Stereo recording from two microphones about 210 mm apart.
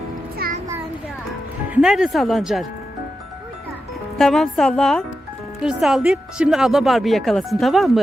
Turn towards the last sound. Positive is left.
turn(degrees=0)  # may be behind; listen again after turning